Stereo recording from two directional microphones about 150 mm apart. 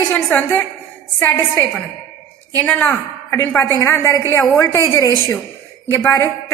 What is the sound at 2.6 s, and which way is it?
A woman's voice, 10° left (ahead or behind).